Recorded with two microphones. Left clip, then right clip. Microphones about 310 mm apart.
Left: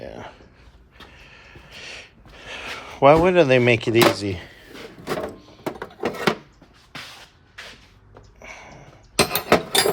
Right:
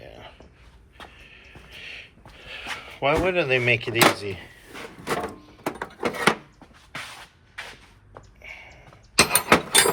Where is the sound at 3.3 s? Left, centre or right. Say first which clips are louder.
Left 5 dB; left.